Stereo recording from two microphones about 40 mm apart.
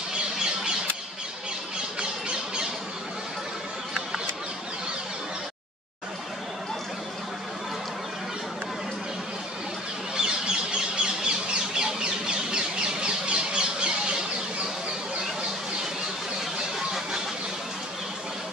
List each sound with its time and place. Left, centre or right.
2.0 s squawk: right
10.1 s bird: right
16.5 s a sound: centre